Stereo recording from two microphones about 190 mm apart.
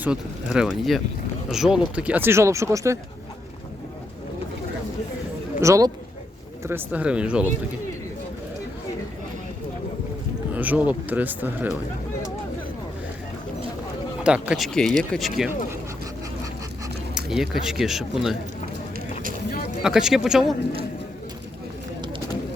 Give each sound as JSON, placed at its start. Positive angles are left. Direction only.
{"t": 0.0, "sound": "speech", "side_deg": -5}
{"t": 5.5, "sound": "speech", "side_deg": -15}
{"t": 10.5, "sound": "speech", "side_deg": -10}
{"t": 14.3, "sound": "speech", "side_deg": -5}
{"t": 17.2, "sound": "speech", "side_deg": -5}
{"t": 19.8, "sound": "speech", "side_deg": 0}